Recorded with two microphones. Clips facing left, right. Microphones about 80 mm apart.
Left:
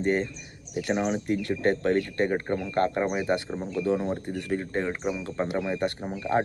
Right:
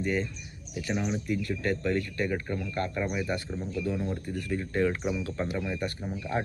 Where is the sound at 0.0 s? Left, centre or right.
Left.